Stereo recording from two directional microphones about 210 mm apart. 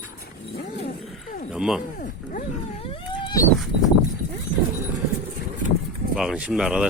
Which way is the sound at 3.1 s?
20° left (ahead or behind).